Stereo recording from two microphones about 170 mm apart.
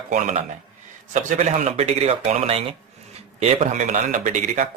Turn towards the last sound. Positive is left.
turn(degrees=-45)  # may be behind; listen again after turning